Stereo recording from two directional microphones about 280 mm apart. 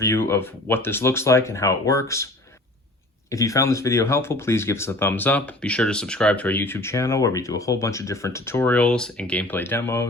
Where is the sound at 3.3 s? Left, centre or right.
Centre.